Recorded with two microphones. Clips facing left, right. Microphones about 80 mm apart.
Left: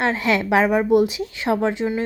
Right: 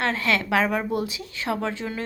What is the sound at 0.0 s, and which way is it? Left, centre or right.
A woman's voice, centre.